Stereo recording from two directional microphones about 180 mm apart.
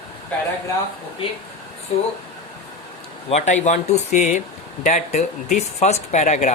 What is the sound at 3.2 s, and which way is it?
Speech, 40° left (ahead or behind).